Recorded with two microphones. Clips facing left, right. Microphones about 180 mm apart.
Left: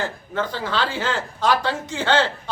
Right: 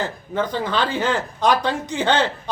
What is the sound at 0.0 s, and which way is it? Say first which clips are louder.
Speech: right 2 dB; 15° right (ahead or behind).